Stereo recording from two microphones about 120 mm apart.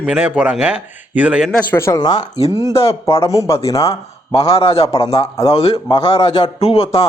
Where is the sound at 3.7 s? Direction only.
25° left (ahead or behind).